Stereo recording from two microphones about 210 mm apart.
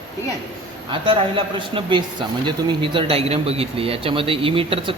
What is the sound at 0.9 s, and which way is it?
A man's voice, 25° right (ahead or behind).